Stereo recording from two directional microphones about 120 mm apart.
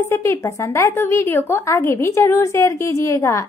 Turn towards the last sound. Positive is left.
turn(degrees=25)  # may be behind; listen again after turning